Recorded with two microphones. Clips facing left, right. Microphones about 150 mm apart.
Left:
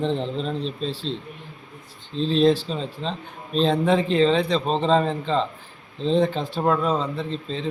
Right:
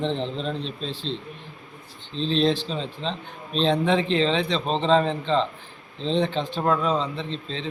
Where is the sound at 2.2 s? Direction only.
5° left (ahead or behind).